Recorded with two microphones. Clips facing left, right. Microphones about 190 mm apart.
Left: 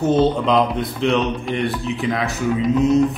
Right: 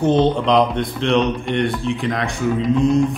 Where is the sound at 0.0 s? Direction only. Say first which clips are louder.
Right 1 dB; 5° left (ahead or behind).